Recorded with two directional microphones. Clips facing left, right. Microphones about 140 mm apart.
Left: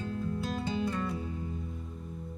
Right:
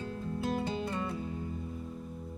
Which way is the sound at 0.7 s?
30° right (ahead or behind).